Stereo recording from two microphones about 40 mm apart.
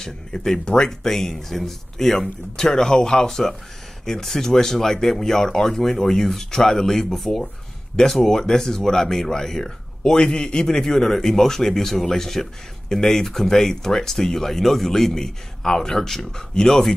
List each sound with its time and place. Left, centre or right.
0.0 s a man's voice: centre
10.8 s speech: centre